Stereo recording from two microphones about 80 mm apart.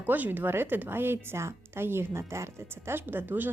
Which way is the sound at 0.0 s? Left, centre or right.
Right.